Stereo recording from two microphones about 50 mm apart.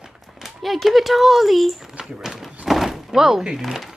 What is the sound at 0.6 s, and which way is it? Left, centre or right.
Speech, centre.